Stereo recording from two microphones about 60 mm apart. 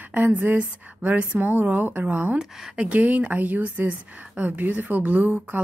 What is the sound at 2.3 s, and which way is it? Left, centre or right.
Speech, centre.